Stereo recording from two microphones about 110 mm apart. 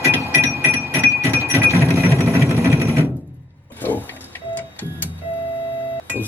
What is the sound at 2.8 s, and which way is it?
Sewing machine, 25° right (ahead or behind).